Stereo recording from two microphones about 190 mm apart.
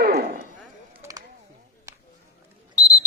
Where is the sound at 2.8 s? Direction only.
15° left (ahead or behind).